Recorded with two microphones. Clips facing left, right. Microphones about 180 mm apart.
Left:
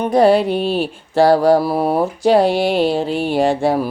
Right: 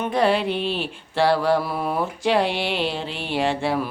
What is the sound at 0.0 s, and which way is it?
Mantra, 40° left (ahead or behind).